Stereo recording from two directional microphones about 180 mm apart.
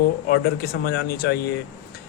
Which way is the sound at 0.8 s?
60° left (ahead or behind).